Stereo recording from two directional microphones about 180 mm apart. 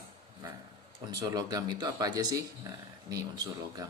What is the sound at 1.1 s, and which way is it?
Speech, 20° right (ahead or behind).